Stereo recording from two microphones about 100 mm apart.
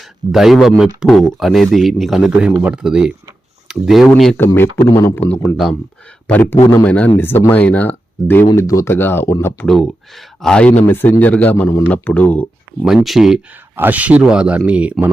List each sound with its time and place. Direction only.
0.3 s speech: 5° right (ahead or behind)
4.5 s speech: 20° left (ahead or behind)
6.2 s speech: 20° left (ahead or behind)
8.5 s speech: 30° left (ahead or behind)
9.6 s speech: centre (ahead or behind)
12.8 s speech: 5° right (ahead or behind)
13.7 s speech: 20° right (ahead or behind)